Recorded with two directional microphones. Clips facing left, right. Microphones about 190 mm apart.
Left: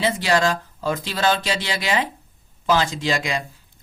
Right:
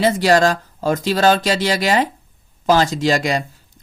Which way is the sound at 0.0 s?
40° right (ahead or behind).